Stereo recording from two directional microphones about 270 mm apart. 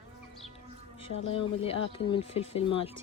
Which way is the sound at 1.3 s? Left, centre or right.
Centre.